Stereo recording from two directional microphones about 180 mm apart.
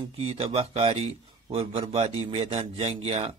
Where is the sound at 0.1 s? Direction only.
35° right (ahead or behind).